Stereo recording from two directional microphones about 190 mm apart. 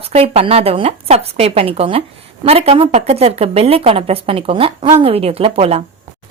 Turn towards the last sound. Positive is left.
turn(degrees=-30)  # may be behind; listen again after turning